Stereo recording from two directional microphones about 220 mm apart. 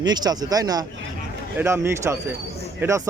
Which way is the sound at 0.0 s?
20° right (ahead or behind).